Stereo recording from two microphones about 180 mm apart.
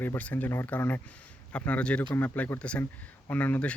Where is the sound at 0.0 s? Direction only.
10° left (ahead or behind).